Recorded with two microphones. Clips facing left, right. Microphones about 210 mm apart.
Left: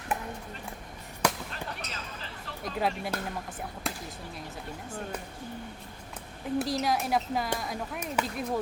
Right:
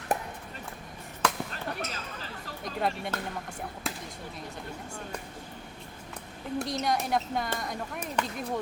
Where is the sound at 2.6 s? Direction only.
Centre (ahead or behind).